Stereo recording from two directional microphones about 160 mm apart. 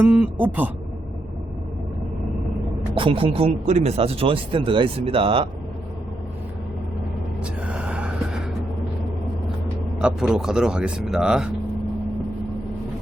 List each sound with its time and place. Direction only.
0.0 s speech: 10° right (ahead or behind)
2.9 s speech: 35° right (ahead or behind)
7.4 s gasp: 5° right (ahead or behind)
10.0 s speech: 5° right (ahead or behind)